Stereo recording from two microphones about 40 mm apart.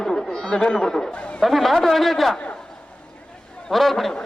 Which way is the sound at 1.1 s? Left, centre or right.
Left.